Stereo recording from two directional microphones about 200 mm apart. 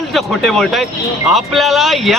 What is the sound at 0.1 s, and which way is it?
Speech, centre (ahead or behind).